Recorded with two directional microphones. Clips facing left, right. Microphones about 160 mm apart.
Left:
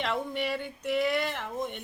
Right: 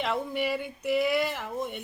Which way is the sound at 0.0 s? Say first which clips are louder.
Right 2 dB; 5° right (ahead or behind).